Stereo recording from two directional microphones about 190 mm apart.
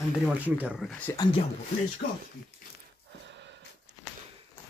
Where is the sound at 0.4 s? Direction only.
5° right (ahead or behind).